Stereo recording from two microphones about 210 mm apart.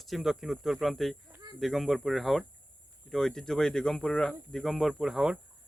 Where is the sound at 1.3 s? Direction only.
20° right (ahead or behind).